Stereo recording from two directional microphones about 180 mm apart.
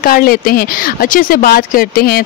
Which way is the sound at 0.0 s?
55° left (ahead or behind).